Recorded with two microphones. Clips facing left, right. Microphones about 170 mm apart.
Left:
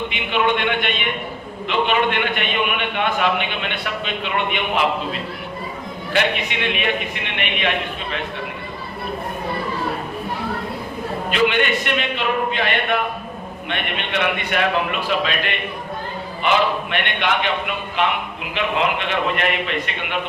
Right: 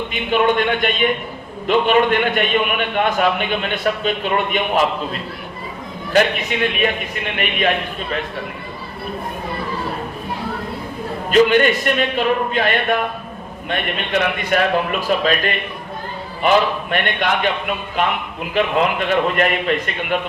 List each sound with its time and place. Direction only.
0.1 s a man's voice: 40° right (ahead or behind)
6.1 s a man's voice: 40° right (ahead or behind)
11.3 s a man's voice: 40° right (ahead or behind)